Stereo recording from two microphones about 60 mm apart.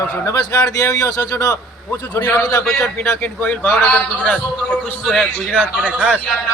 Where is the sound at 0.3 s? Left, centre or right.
Left.